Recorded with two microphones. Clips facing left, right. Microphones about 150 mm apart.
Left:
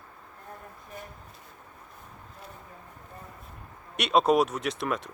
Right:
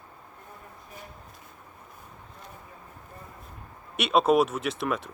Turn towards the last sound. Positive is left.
turn(degrees=0)  # may be behind; listen again after turning